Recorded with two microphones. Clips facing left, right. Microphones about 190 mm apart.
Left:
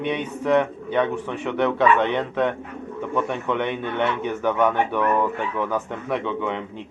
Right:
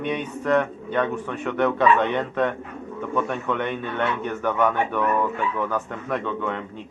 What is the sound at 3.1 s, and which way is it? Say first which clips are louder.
A man's voice: left 1 dB; 10° left (ahead or behind).